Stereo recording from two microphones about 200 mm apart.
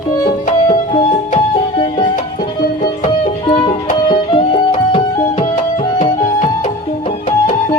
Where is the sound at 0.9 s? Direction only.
30° left (ahead or behind).